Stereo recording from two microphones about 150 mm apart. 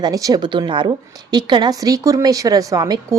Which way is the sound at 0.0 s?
25° right (ahead or behind).